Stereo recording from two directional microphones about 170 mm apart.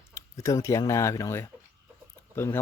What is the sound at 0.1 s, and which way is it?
Speech, 20° left (ahead or behind).